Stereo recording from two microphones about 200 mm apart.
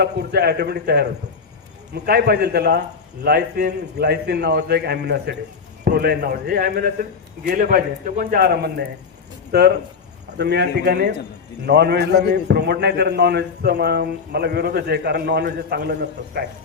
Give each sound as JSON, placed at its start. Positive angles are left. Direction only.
{"t": 0.0, "sound": "a man's voice", "side_deg": -55}
{"t": 2.0, "sound": "a man's voice", "side_deg": -55}